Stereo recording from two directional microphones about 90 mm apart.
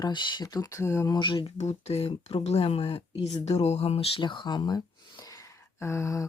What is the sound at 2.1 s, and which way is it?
Speech, 85° left.